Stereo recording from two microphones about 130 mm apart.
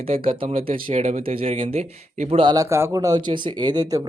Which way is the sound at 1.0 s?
50° right (ahead or behind).